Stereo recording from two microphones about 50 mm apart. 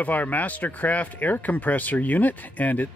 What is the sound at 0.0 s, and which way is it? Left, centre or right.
Speech, left.